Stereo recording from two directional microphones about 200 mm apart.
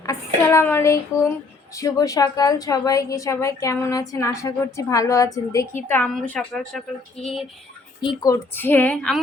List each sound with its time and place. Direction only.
0.4 s a woman's voice: 10° left (ahead or behind)
8.0 s a woman's voice: 15° left (ahead or behind)